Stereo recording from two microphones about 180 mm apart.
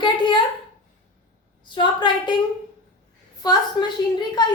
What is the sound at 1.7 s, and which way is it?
Speech, 25° left (ahead or behind).